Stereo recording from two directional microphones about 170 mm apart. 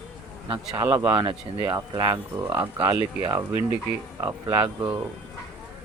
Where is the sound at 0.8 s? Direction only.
20° right (ahead or behind).